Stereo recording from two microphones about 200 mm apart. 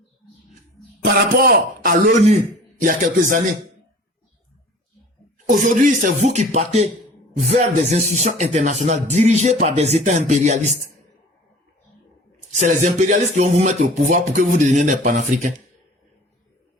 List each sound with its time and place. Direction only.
1.0 s speech: 45° right (ahead or behind)
5.5 s speech: 40° right (ahead or behind)
12.5 s speech: 35° right (ahead or behind)